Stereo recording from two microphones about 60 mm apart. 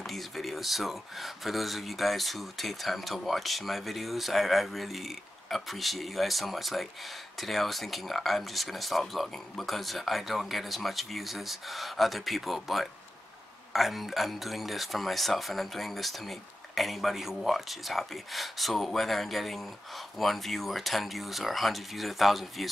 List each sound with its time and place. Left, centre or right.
0.0 s speech: centre